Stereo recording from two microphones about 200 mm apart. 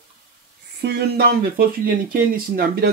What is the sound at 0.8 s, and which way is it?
Speech, 55° right (ahead or behind).